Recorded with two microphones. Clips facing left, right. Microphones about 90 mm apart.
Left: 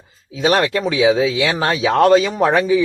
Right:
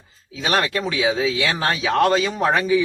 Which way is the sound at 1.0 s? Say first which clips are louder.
Left 6 dB; 25° left (ahead or behind).